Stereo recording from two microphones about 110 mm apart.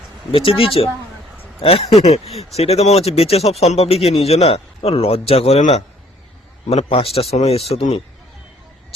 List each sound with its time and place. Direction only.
0.3 s speech: 55° left (ahead or behind); by 5.8 s 80° left
6.7 s speech: 65° left (ahead or behind)